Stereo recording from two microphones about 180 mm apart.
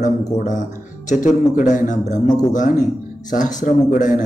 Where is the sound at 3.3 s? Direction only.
45° left (ahead or behind).